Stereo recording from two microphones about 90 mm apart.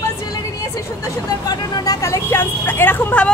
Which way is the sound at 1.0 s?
50° left (ahead or behind).